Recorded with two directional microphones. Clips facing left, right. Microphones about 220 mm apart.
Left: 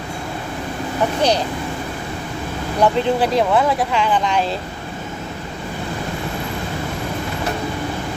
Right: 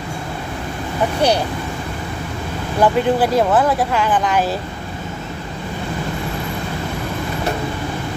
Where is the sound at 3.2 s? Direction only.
5° right (ahead or behind).